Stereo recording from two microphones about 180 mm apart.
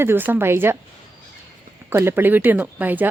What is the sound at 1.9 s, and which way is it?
A woman's voice, 15° right (ahead or behind).